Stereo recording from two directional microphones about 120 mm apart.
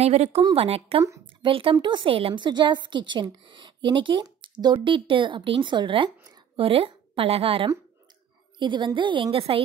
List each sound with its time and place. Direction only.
0.0 s a woman's voice: 60° right (ahead or behind)
8.5 s a woman's voice: 40° right (ahead or behind)